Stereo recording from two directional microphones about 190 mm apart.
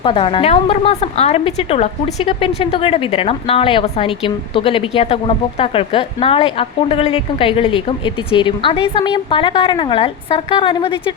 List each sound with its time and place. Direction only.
0.0 s a woman's voice: 25° left (ahead or behind)